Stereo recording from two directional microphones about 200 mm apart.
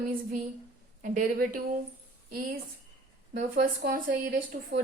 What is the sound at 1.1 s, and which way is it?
Speech, 45° right (ahead or behind).